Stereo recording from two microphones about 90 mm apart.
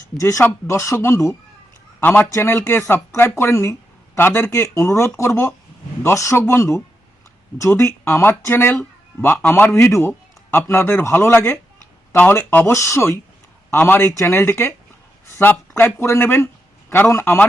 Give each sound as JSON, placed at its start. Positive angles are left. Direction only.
{"t": 0.2, "sound": "speech", "side_deg": 35}
{"t": 2.3, "sound": "speech", "side_deg": 25}